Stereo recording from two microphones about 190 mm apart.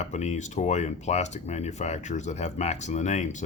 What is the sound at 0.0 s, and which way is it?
Speech, 35° left (ahead or behind).